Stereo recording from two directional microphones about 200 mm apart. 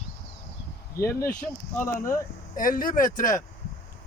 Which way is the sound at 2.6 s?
45° left (ahead or behind).